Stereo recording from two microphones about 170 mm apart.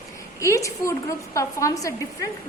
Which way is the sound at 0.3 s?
20° left (ahead or behind).